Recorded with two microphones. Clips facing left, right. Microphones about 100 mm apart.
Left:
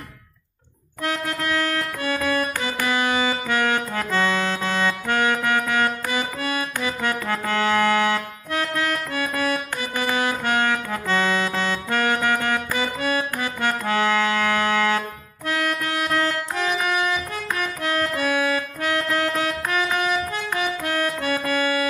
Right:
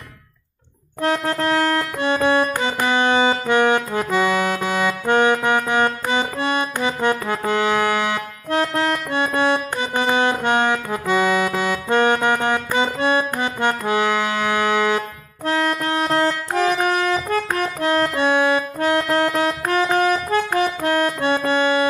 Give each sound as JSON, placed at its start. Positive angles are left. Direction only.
{"t": 1.0, "sound": "music", "side_deg": -35}
{"t": 8.5, "sound": "music", "side_deg": -30}
{"t": 11.9, "sound": "accordion", "side_deg": -20}
{"t": 15.4, "sound": "music", "side_deg": -30}
{"t": 16.5, "sound": "accordion", "side_deg": -40}
{"t": 21.4, "sound": "organ", "side_deg": -25}